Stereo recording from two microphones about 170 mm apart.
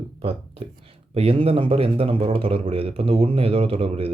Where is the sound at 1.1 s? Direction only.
35° right (ahead or behind).